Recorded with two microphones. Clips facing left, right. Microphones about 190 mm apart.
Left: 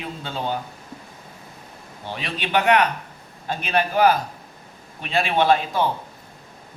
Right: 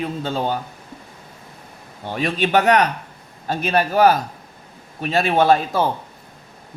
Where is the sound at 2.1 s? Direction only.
45° right (ahead or behind).